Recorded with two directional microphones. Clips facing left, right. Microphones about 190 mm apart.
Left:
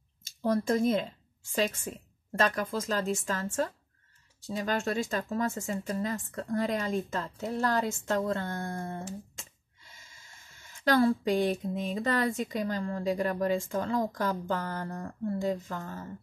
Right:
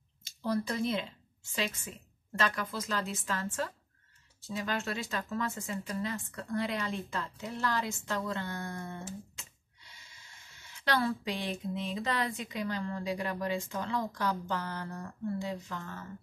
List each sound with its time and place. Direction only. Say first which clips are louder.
0.2 s a woman's voice: left 4 dB; 45° left (ahead or behind)